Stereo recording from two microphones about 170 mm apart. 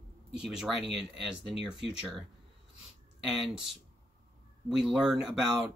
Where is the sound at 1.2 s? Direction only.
Centre (ahead or behind).